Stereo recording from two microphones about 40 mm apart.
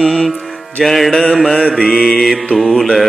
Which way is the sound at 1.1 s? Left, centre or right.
Centre.